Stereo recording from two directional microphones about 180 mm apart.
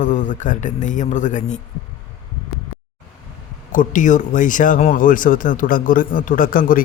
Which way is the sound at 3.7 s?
45° left (ahead or behind).